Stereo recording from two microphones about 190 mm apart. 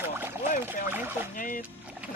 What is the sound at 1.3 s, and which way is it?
Speech, 45° left (ahead or behind).